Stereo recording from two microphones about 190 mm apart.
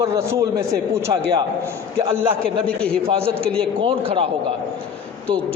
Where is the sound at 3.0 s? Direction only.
30° right (ahead or behind).